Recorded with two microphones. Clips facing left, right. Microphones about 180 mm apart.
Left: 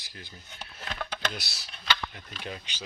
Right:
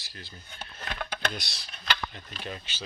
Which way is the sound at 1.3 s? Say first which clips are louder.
Right 1 dB; 5° left (ahead or behind).